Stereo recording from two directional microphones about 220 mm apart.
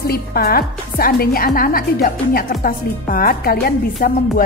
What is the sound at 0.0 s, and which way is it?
A woman's voice, 45° left (ahead or behind).